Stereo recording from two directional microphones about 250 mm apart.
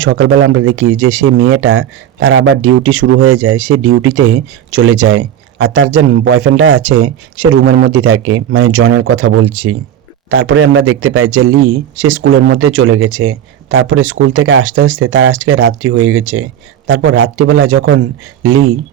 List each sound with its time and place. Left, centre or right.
0.0 s a man's voice: right